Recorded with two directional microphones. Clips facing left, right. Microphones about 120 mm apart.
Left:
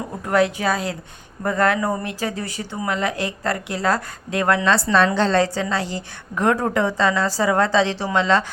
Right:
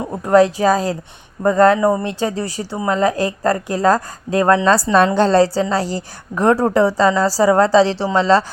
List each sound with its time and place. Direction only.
0.0 s speech: 30° right (ahead or behind)